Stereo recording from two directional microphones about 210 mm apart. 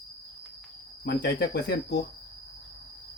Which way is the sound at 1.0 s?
55° left (ahead or behind).